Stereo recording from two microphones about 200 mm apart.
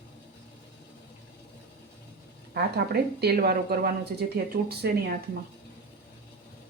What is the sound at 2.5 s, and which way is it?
A woman's voice, 50° right (ahead or behind).